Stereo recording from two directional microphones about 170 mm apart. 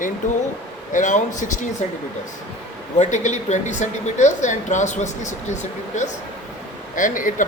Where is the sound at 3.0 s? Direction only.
45° left (ahead or behind).